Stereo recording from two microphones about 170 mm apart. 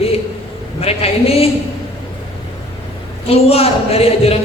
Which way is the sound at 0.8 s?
35° left (ahead or behind).